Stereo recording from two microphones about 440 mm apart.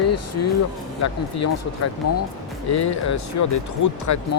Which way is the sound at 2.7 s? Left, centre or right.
Left.